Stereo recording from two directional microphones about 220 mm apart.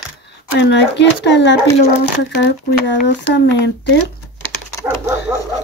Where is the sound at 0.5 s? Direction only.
50° left (ahead or behind).